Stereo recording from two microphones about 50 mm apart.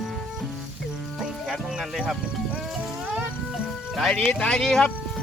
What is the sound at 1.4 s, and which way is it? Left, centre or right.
Speech, centre.